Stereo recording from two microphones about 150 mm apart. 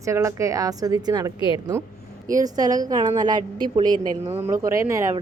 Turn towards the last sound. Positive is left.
turn(degrees=-20)  # may be behind; listen again after turning